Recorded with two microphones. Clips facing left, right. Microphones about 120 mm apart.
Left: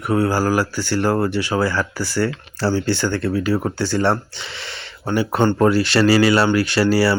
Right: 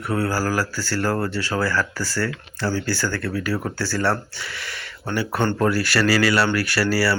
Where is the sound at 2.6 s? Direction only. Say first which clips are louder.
Left 5 dB; 30° left (ahead or behind).